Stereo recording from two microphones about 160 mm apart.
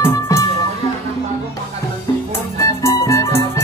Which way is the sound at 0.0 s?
15° left (ahead or behind).